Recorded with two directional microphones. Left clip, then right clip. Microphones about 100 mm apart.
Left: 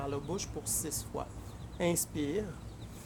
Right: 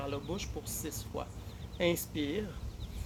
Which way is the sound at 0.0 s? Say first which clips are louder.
Left 1 dB; 40° left (ahead or behind).